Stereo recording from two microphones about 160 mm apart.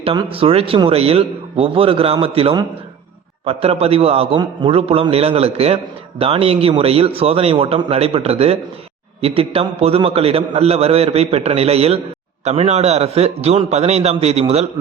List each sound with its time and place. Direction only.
0.0 s a man's voice: 35° right (ahead or behind)